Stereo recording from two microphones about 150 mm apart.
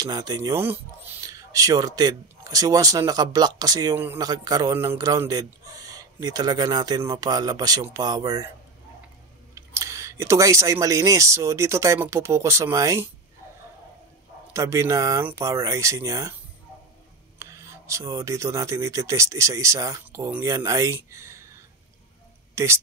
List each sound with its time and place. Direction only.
0.0 s speech: 25° right (ahead or behind)
9.6 s speech: 20° right (ahead or behind)
14.5 s speech: 20° right (ahead or behind)
17.4 s speech: 20° right (ahead or behind)
22.6 s speech: 20° right (ahead or behind)